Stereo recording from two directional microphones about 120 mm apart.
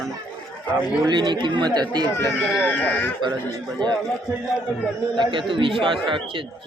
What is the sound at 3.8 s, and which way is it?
Speech, 40° right (ahead or behind).